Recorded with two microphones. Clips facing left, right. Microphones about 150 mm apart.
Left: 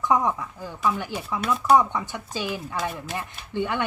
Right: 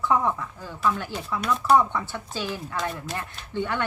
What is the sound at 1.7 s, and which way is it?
Speech, 15° left (ahead or behind).